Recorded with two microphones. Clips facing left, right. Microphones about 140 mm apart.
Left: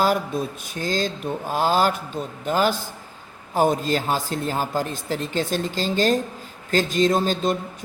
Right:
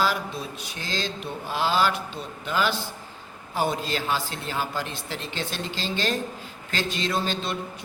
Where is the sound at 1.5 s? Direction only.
45° left (ahead or behind).